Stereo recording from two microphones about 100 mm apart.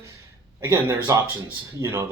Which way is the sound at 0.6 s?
30° right (ahead or behind).